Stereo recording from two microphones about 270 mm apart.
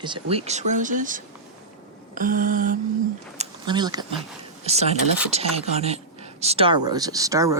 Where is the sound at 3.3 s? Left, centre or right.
Centre.